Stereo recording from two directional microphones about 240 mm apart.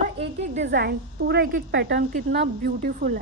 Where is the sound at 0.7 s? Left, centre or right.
Right.